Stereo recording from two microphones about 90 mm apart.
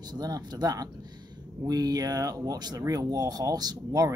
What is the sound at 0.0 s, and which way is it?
Speech, 50° right (ahead or behind).